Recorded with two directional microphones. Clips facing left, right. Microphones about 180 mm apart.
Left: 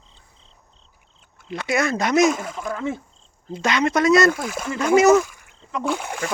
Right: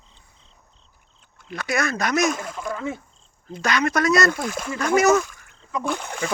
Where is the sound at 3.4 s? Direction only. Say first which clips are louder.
Left 2 dB; 25° left (ahead or behind).